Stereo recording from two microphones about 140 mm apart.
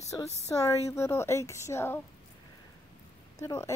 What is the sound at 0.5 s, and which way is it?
Speech, 20° left (ahead or behind).